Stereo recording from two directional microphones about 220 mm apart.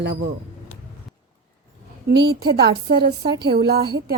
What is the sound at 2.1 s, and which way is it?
A woman's voice, 45° right (ahead or behind).